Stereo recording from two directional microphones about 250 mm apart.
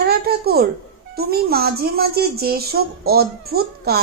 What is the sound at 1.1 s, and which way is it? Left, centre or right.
Speech, right.